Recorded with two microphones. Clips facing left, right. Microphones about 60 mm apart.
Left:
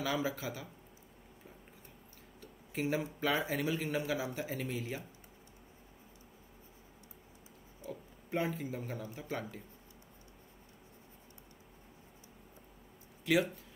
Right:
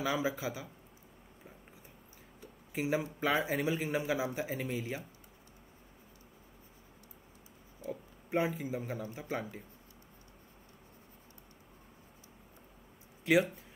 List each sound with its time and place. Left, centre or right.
0.0 s a man's voice: centre
2.4 s a sound: centre
3.4 s a man's voice: centre
7.8 s a man's voice: centre
13.2 s speech: right